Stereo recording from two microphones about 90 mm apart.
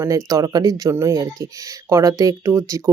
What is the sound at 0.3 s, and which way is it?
Speech, 45° right (ahead or behind).